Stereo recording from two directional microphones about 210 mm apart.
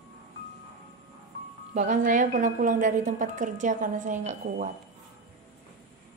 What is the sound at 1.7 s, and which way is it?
A woman's voice, 35° right (ahead or behind).